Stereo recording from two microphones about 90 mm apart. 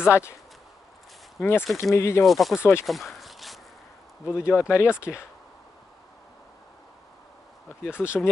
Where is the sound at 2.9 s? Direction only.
Centre (ahead or behind).